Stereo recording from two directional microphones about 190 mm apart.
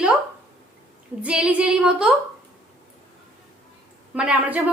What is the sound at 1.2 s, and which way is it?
Female singing, 5° right (ahead or behind).